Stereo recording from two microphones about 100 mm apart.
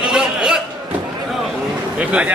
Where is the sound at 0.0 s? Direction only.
5° right (ahead or behind).